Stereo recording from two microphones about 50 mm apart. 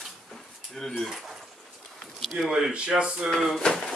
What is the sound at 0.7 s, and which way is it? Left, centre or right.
A man's voice, centre.